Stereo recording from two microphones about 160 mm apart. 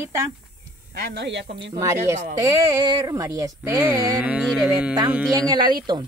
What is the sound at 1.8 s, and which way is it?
Speech, 20° right (ahead or behind).